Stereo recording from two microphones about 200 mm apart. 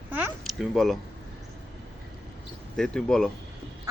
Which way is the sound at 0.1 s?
5° right (ahead or behind).